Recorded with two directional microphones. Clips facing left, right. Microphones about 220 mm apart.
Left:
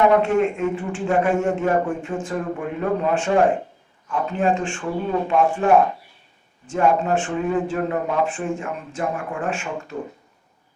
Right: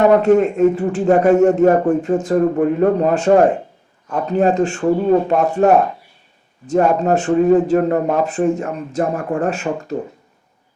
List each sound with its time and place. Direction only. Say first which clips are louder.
0.0 s a man's voice: right 5 dB; 40° right (ahead or behind)